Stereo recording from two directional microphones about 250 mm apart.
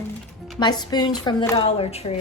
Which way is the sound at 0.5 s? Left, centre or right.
Centre.